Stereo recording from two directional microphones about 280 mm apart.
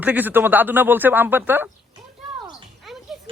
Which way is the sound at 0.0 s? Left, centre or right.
Centre.